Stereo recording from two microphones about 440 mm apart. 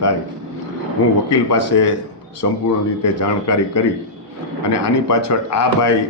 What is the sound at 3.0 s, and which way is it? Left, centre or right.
A man's voice, left.